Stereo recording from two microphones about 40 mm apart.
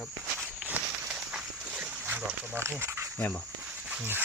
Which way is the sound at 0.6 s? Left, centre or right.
Right.